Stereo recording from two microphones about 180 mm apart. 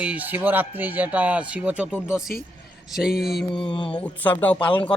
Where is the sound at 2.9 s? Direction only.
5° right (ahead or behind).